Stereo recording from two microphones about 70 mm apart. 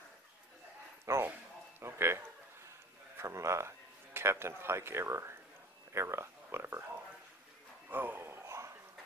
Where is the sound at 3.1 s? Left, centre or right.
Right.